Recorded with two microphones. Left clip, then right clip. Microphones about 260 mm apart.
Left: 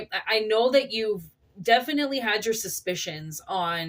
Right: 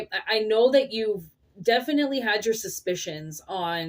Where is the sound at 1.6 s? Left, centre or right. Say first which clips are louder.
Left 1 dB; centre.